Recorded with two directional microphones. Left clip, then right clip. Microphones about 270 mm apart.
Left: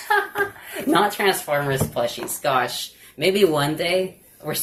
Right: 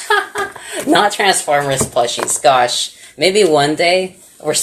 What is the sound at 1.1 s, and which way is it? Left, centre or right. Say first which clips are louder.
Speech: right 7 dB; right.